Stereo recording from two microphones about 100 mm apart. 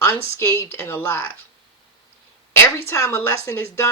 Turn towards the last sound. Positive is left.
turn(degrees=25)  # may be behind; listen again after turning